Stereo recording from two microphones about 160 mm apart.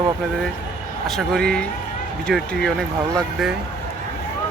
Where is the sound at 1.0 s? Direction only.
Centre (ahead or behind).